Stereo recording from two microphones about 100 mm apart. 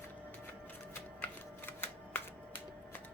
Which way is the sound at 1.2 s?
20° left (ahead or behind).